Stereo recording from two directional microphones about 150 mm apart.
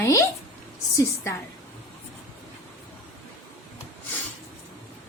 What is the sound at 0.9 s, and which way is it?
Speech, 20° left (ahead or behind).